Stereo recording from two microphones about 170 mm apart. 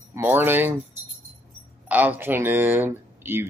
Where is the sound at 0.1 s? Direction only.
10° right (ahead or behind).